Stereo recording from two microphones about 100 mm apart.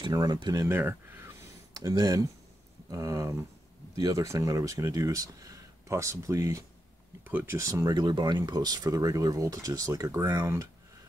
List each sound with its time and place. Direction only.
0.1 s speech: 40° right (ahead or behind)
0.7 s speech: 20° right (ahead or behind)
1.8 s speech: 35° right (ahead or behind)
7.2 s speech: 20° right (ahead or behind)
7.5 s speech: 35° right (ahead or behind)